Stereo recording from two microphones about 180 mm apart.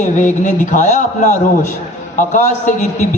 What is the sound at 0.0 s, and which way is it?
A man's voice, 45° left (ahead or behind).